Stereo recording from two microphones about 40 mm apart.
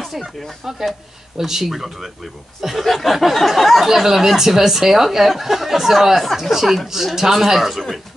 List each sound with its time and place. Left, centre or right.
0.1 s speech: centre
0.7 s a man's voice: centre